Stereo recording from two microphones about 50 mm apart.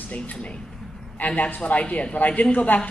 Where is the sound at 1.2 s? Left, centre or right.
Left.